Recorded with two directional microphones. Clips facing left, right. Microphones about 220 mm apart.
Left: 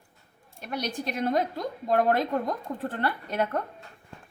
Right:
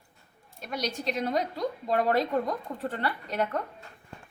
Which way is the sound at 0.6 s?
55° left (ahead or behind).